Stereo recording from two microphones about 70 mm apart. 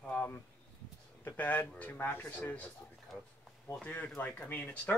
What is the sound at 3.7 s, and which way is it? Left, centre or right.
Speech, left.